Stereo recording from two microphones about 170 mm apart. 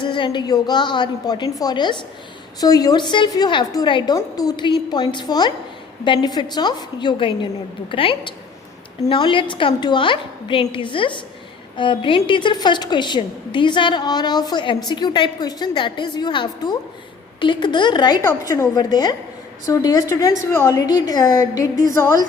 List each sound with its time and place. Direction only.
0.0 s a woman's voice: 30° left (ahead or behind)